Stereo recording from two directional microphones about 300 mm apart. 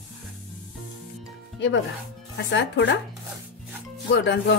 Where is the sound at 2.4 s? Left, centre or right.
Left.